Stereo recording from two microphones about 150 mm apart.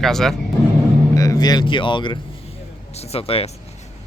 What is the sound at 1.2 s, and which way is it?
Speech, 25° left (ahead or behind).